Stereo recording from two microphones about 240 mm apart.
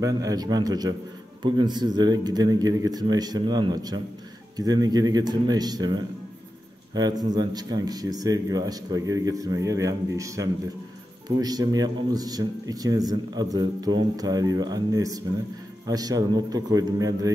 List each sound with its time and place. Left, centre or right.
0.0 s speech: centre